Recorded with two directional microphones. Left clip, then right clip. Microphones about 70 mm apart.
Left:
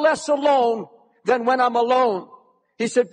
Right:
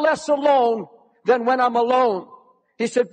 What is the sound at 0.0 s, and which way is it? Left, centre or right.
A man's voice, left.